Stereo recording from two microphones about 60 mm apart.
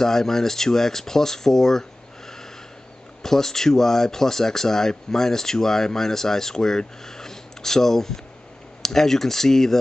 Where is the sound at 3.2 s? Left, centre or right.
Centre.